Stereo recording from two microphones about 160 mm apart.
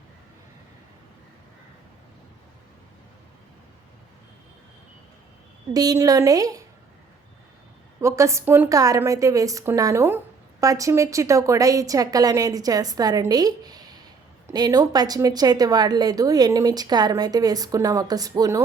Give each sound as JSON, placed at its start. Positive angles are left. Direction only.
{"t": 5.7, "sound": "a woman's voice", "side_deg": -25}
{"t": 8.0, "sound": "a woman's voice", "side_deg": -20}